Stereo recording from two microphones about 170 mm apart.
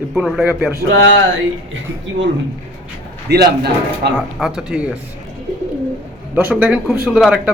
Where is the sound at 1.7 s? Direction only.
90° right.